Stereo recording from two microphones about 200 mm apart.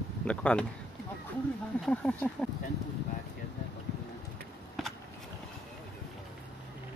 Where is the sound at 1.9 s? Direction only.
5° left (ahead or behind).